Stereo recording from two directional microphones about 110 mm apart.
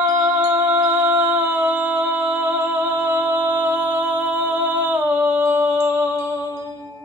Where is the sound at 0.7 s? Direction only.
10° right (ahead or behind).